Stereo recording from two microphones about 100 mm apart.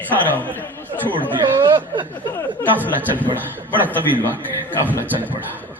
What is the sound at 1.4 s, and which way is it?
Chuckle, 55° right (ahead or behind).